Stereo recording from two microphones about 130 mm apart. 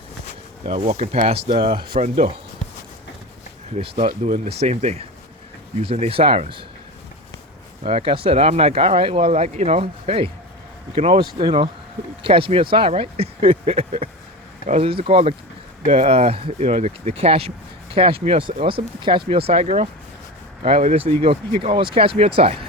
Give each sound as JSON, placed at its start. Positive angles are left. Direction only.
{"t": 0.6, "sound": "speech", "side_deg": -55}
{"t": 1.5, "sound": "speech", "side_deg": -40}
{"t": 2.0, "sound": "speech", "side_deg": -60}
{"t": 3.8, "sound": "speech", "side_deg": -45}
{"t": 4.4, "sound": "speech", "side_deg": -55}
{"t": 5.8, "sound": "speech", "side_deg": -45}
{"t": 7.9, "sound": "speech", "side_deg": -45}